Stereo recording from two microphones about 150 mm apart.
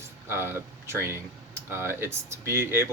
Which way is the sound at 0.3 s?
15° right (ahead or behind).